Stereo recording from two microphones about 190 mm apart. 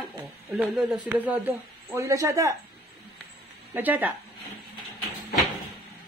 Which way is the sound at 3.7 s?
10° right (ahead or behind).